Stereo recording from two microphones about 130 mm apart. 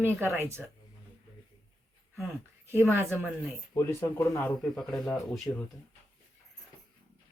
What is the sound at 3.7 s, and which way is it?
Speech, 20° left (ahead or behind).